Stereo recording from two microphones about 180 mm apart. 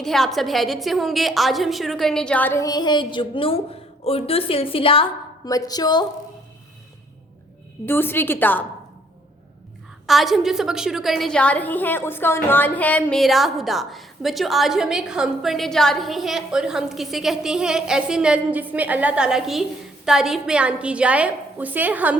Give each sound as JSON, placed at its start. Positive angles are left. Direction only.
{"t": 0.0, "sound": "a woman's voice", "side_deg": 0}
{"t": 7.9, "sound": "a woman's voice", "side_deg": 10}
{"t": 10.1, "sound": "a woman's voice", "side_deg": 0}